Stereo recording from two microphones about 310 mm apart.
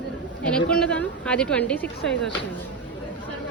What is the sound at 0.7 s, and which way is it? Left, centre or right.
Speech, centre.